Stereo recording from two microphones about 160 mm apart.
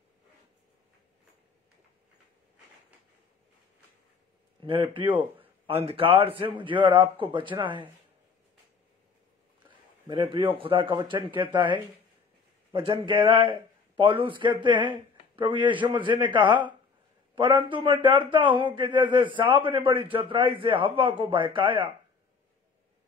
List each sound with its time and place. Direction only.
4.6 s a man's voice: 30° right (ahead or behind)
9.7 s a man's voice: 30° right (ahead or behind)